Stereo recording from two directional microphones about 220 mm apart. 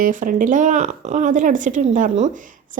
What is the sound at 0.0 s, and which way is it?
A woman's voice, 35° right (ahead or behind).